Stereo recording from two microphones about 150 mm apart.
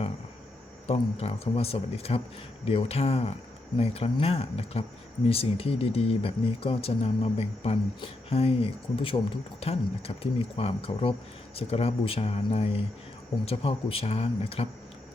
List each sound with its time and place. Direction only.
0.9 s speech: 40° left (ahead or behind)